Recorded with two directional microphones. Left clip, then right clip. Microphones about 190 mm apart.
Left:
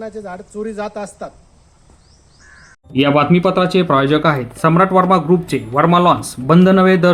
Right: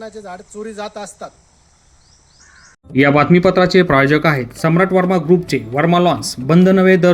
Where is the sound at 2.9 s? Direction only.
Centre (ahead or behind).